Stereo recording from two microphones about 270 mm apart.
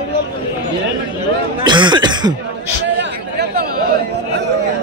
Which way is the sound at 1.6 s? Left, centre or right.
Centre.